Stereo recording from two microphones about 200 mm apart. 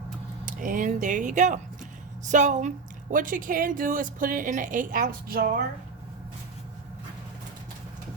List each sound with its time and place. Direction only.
0.4 s speech: 40° right (ahead or behind)